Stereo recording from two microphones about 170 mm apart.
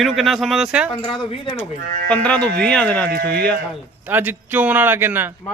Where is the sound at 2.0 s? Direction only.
5° left (ahead or behind).